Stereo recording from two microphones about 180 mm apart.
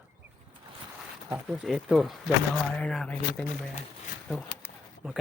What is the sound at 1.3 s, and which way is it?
Speech, centre (ahead or behind).